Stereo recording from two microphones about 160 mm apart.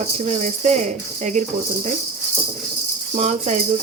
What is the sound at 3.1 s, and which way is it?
Speech, 45° right (ahead or behind).